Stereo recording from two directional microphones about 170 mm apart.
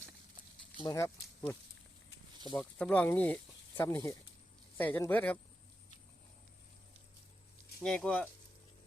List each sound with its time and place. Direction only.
0.8 s speech: 20° left (ahead or behind)
2.6 s speech: 5° left (ahead or behind)
7.8 s speech: 5° left (ahead or behind)